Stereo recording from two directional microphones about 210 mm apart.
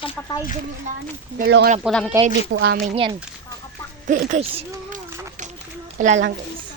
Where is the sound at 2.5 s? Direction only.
50° right (ahead or behind).